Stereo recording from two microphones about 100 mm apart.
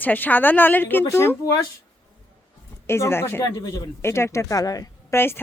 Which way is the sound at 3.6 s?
35° left (ahead or behind).